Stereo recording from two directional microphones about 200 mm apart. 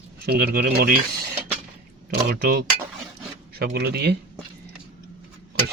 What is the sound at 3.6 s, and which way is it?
Speech, 55° right (ahead or behind).